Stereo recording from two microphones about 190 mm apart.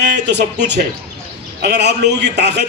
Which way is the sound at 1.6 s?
60° right (ahead or behind).